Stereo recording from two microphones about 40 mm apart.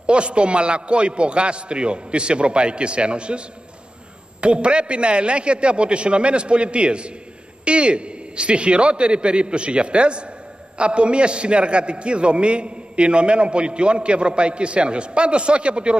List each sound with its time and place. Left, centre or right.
0.0 s a man's voice: right